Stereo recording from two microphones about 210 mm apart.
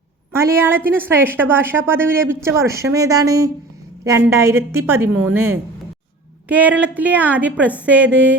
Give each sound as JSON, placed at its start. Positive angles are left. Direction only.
{"t": 0.3, "sound": "a woman's voice", "side_deg": -10}